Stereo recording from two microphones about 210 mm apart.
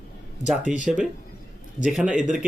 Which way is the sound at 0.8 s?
5° right (ahead or behind).